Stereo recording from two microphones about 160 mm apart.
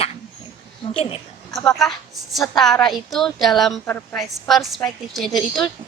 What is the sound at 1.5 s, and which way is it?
A woman's voice, 5° left (ahead or behind).